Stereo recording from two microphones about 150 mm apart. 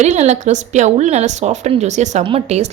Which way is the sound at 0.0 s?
50° right (ahead or behind).